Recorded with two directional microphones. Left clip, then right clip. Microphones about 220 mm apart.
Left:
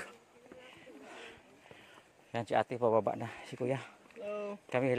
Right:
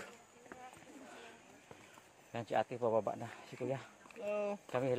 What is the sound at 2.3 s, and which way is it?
Speech, 45° left (ahead or behind).